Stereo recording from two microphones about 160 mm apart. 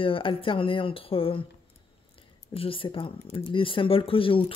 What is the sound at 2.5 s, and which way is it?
Speech, 35° left (ahead or behind).